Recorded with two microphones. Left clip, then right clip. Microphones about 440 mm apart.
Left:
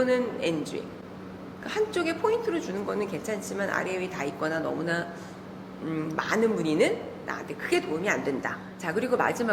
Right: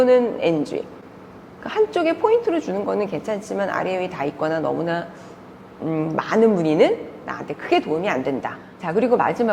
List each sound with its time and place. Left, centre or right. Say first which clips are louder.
0.0 s a woman's voice: right 10 dB; right